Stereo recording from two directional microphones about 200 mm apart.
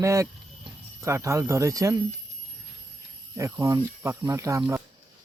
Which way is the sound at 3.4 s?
15° right (ahead or behind).